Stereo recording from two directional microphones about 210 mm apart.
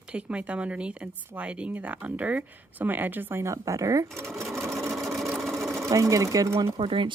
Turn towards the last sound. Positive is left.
turn(degrees=-25)  # may be behind; listen again after turning